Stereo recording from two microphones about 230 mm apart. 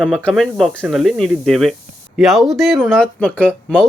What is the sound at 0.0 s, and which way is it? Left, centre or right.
A man's voice, centre.